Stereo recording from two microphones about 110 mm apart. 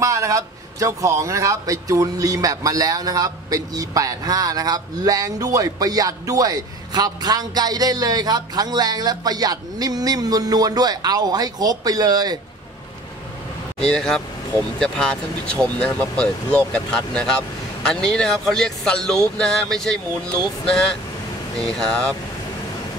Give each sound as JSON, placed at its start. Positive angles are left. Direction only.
{"t": 0.0, "sound": "a man's voice", "side_deg": -30}
{"t": 13.7, "sound": "speech", "side_deg": 5}